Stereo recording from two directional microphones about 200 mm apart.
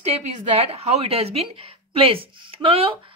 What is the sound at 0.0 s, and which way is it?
Speech, 30° right (ahead or behind).